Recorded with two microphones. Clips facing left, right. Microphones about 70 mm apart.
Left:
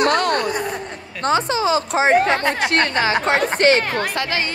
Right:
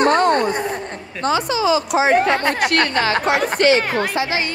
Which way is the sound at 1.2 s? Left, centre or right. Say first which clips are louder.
Even; left.